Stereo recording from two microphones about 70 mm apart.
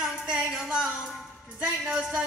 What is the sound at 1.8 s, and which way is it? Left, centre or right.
Music, centre.